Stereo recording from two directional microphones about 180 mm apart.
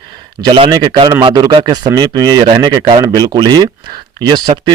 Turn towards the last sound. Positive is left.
turn(degrees=-25)  # may be behind; listen again after turning